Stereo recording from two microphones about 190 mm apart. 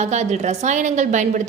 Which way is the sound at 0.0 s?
35° right (ahead or behind).